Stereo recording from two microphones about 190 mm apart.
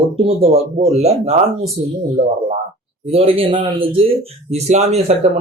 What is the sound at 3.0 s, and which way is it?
Speech, 30° right (ahead or behind).